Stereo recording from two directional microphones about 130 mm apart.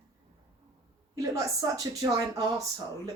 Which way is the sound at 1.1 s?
25° right (ahead or behind).